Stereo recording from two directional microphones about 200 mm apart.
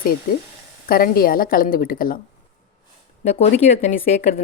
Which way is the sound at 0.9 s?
45° left (ahead or behind).